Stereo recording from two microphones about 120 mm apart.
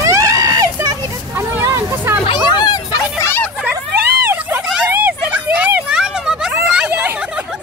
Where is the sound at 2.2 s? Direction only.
35° left (ahead or behind).